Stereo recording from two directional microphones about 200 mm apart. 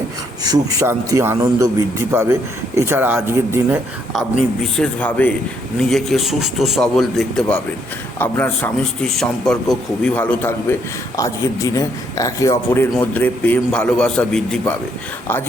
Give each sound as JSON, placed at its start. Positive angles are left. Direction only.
{"t": 0.4, "sound": "speech", "side_deg": -15}
{"t": 4.6, "sound": "a man's voice", "side_deg": 5}